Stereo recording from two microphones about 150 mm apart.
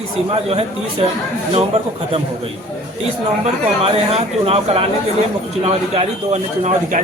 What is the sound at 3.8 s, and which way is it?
A man's voice, 40° right (ahead or behind).